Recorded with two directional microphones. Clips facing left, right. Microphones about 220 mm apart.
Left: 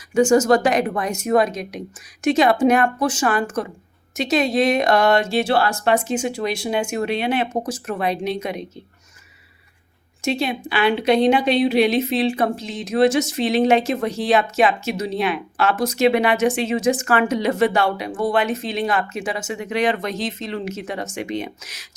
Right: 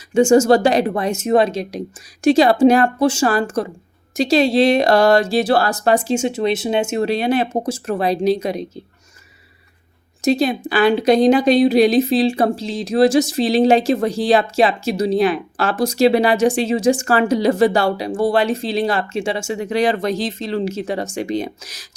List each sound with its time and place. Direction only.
0.1 s speech: 25° right (ahead or behind)
10.2 s a woman's voice: 40° right (ahead or behind)